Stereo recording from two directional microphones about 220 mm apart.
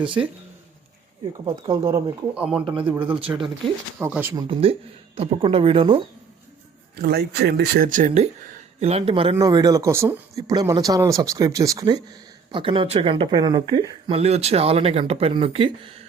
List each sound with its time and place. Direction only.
1.3 s speech: 20° right (ahead or behind)
4.4 s speech: 25° right (ahead or behind)
7.0 s speech: 45° right (ahead or behind); by 16.0 s 25° right (ahead or behind)